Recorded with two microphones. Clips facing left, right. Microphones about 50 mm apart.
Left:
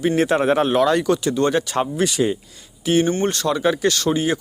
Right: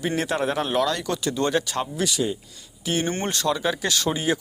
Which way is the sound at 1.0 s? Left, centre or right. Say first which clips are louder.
Left 6 dB; centre.